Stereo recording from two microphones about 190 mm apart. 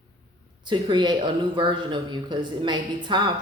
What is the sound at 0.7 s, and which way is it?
Speech, 25° right (ahead or behind).